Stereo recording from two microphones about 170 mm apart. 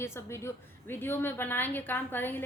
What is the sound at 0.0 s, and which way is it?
A woman's voice, 15° left (ahead or behind).